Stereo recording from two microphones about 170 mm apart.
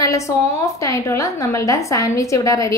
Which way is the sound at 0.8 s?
20° left (ahead or behind).